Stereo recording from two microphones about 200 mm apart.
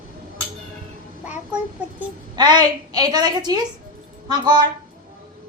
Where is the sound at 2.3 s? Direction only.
20° right (ahead or behind).